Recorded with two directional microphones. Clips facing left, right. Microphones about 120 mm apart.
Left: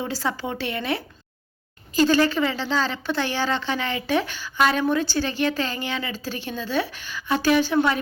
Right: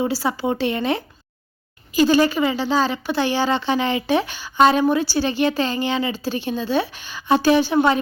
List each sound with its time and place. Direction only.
0.1 s speech: 10° right (ahead or behind)